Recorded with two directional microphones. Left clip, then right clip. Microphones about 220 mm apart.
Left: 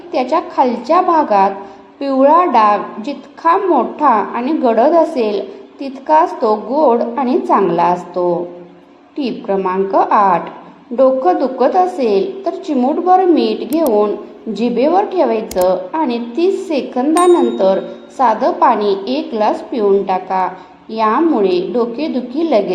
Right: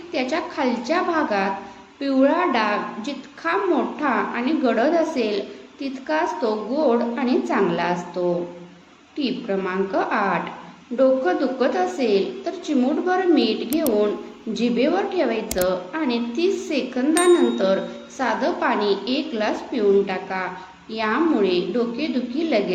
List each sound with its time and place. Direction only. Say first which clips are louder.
0.1 s a woman's voice: left 9 dB; 20° left (ahead or behind)
15.4 s a woman's voice: left 8 dB; centre (ahead or behind)
15.9 s a woman's voice: left 7 dB; 20° left (ahead or behind)
18.2 s a woman's voice: left 10 dB; 20° left (ahead or behind)